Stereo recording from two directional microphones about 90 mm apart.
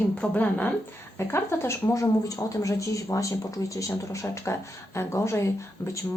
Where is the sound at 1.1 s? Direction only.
30° left (ahead or behind).